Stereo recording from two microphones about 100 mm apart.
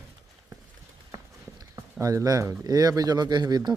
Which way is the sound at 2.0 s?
35° right (ahead or behind).